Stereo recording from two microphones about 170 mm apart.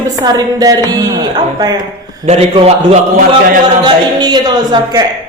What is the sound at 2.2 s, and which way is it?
A man's voice, 40° right (ahead or behind).